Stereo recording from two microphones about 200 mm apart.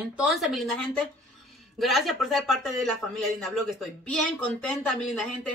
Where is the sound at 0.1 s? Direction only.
5° right (ahead or behind).